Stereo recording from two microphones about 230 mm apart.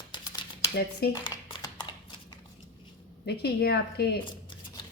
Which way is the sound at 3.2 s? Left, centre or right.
Left.